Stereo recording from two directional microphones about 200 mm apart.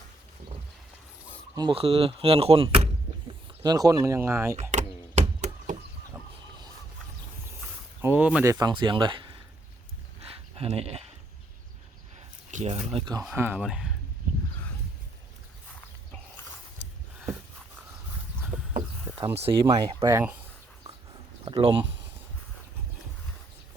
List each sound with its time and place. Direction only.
1.5 s speech: 25° right (ahead or behind)
3.6 s speech: 20° right (ahead or behind)
4.7 s a sound: 35° right (ahead or behind)
7.6 s a sound: 10° right (ahead or behind)
8.5 s speech: 20° right (ahead or behind)
10.2 s a sound: 30° right (ahead or behind)
12.5 s speech: 35° right (ahead or behind)
13.2 s speech: 10° right (ahead or behind)
19.1 s a sound: 15° right (ahead or behind)
19.4 s speech: 25° right (ahead or behind)
20.1 s speech: 10° right (ahead or behind)
21.4 s speech: 25° right (ahead or behind)